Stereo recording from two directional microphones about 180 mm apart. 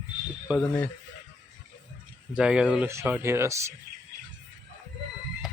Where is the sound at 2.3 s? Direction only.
5° right (ahead or behind).